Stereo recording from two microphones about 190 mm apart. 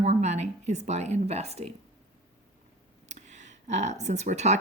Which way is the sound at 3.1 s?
35° right (ahead or behind).